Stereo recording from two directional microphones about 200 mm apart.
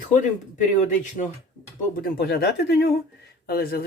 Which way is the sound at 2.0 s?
50° left (ahead or behind).